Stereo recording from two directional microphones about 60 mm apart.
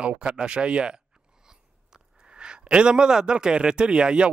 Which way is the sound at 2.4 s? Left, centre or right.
Centre.